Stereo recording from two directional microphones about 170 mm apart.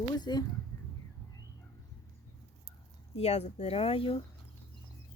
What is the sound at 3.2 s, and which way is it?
Speech, 40° left (ahead or behind).